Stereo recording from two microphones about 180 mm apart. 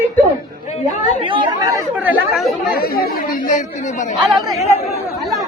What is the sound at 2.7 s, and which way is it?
Speech, 55° left (ahead or behind).